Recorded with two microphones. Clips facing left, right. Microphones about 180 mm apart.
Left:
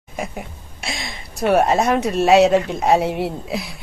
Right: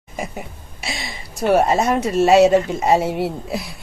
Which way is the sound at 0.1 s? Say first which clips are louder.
Even; centre (ahead or behind).